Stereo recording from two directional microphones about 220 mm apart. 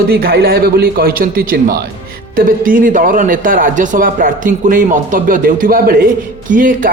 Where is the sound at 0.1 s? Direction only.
45° right (ahead or behind).